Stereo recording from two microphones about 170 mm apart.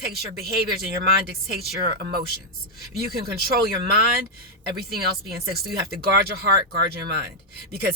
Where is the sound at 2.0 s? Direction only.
65° right (ahead or behind).